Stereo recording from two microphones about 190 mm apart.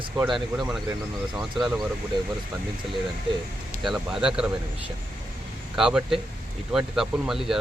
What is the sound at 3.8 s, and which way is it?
Speech, centre (ahead or behind).